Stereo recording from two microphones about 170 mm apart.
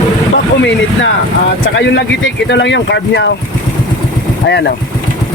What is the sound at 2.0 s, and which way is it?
Speech, 90° left.